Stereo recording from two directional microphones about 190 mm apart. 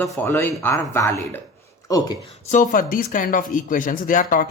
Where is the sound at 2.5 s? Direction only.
40° left (ahead or behind).